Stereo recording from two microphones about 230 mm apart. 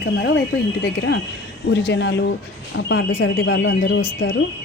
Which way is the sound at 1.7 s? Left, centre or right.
Left.